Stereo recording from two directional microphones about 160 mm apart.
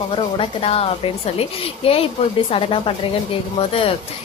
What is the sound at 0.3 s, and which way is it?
A woman's voice, 40° left (ahead or behind).